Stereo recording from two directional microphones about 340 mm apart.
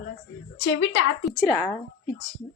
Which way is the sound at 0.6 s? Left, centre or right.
Left.